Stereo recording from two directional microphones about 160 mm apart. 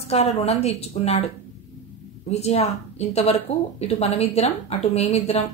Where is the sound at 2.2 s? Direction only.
40° left (ahead or behind).